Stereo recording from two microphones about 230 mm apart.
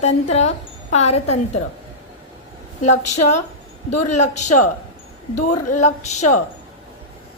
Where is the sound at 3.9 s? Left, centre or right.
Left.